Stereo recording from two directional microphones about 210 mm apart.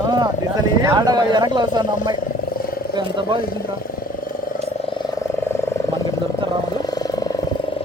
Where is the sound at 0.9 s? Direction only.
20° right (ahead or behind).